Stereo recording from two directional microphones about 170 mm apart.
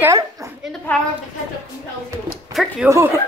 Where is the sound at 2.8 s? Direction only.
15° right (ahead or behind).